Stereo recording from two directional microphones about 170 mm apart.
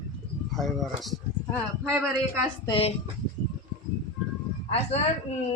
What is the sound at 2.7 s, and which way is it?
Speech, 35° left (ahead or behind).